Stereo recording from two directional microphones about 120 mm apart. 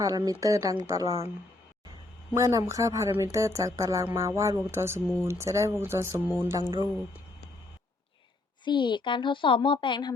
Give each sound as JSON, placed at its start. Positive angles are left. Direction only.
{"t": 0.0, "sound": "speech", "side_deg": -30}
{"t": 2.3, "sound": "speech", "side_deg": -25}
{"t": 8.6, "sound": "a woman's voice", "side_deg": 40}